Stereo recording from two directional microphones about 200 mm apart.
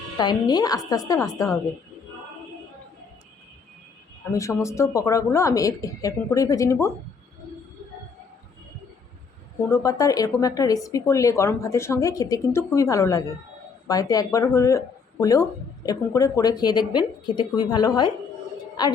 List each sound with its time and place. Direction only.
0.2 s speech: 20° left (ahead or behind)
4.3 s speech: 15° left (ahead or behind)
9.6 s speech: 15° left (ahead or behind)